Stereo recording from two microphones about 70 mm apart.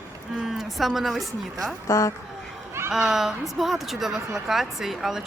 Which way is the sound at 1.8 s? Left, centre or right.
Left.